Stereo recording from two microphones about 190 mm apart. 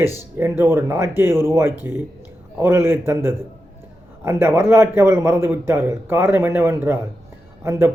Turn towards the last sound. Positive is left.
turn(degrees=-15)  # may be behind; listen again after turning